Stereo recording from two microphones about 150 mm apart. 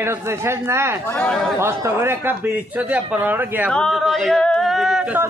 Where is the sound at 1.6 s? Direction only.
15° right (ahead or behind).